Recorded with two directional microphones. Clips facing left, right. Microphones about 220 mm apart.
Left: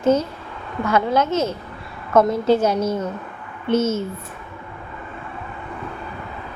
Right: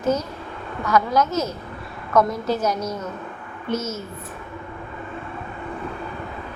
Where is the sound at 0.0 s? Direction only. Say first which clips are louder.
Left 5 dB; 30° left (ahead or behind).